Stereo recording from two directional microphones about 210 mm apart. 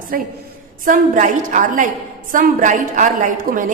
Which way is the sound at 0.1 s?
40° right (ahead or behind).